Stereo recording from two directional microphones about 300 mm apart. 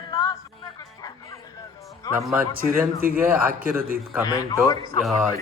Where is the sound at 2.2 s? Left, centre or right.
Centre.